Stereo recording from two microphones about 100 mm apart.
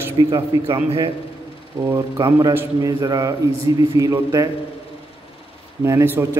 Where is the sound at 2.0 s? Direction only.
40° right (ahead or behind).